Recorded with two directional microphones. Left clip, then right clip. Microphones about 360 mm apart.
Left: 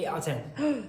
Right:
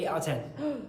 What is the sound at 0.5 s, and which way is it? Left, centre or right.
Speech, left.